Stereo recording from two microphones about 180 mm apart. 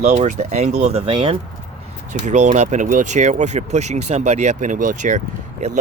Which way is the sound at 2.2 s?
40° right (ahead or behind).